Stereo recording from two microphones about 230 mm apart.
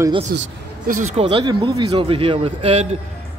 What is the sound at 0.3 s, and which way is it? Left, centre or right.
A man's voice, right.